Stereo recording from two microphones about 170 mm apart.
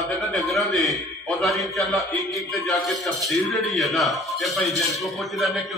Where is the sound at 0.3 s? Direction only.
Centre (ahead or behind).